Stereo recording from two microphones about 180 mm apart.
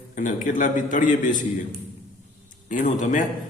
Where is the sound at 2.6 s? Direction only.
45° left (ahead or behind).